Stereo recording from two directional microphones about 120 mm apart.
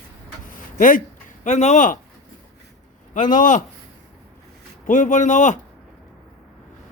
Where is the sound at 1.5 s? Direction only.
75° left (ahead or behind); by 2.0 s 90° left.